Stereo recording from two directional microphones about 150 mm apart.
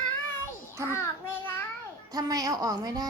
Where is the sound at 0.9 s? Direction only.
15° left (ahead or behind).